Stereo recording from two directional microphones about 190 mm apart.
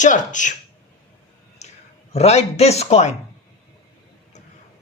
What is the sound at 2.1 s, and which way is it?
Speech, 35° left (ahead or behind).